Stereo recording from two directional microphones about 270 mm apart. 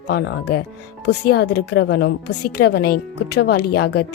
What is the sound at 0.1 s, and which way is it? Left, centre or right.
Speech, left.